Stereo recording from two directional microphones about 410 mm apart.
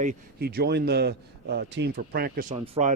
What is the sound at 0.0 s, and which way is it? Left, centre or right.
A man's voice, right.